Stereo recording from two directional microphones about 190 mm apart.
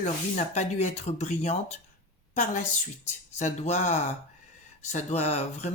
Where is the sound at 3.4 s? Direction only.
40° left (ahead or behind).